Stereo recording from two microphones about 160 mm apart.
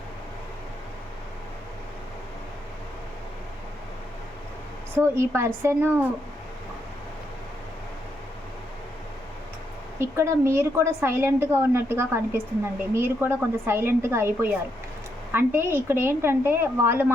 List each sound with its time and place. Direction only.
4.9 s a woman's voice: 15° right (ahead or behind)
10.0 s a woman's voice: 15° right (ahead or behind)